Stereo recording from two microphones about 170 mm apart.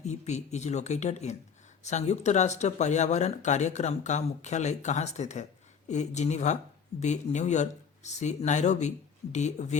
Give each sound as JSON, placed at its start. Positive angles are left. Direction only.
{"t": 0.0, "sound": "speech", "side_deg": 40}